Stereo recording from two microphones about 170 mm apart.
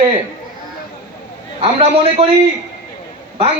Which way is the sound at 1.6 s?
35° right (ahead or behind).